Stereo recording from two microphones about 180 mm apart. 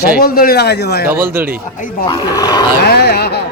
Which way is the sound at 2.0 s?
25° left (ahead or behind).